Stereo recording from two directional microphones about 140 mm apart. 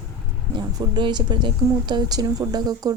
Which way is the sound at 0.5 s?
35° right (ahead or behind).